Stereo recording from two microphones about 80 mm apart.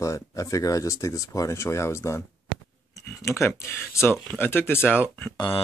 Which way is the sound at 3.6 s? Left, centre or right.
Left.